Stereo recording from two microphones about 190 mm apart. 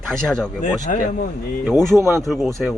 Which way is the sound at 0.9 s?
45° left (ahead or behind).